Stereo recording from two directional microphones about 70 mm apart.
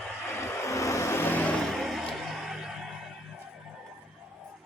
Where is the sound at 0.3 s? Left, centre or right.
Left.